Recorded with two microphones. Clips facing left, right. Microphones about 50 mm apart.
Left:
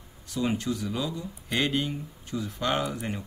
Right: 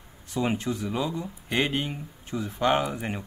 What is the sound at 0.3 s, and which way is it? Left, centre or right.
Speech, right.